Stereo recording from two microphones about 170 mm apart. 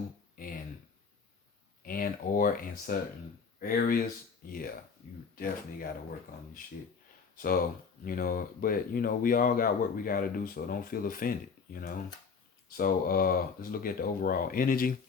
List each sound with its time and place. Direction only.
0.3 s a sound: 55° left (ahead or behind)
1.8 s speech: 55° left (ahead or behind)
7.3 s speech: 60° left (ahead or behind)